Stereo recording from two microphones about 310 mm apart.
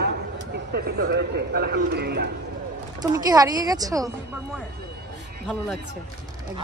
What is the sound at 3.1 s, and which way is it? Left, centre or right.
Speech, centre.